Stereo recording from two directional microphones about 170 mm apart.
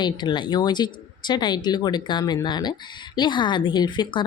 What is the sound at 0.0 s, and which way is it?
Speech, 25° left (ahead or behind).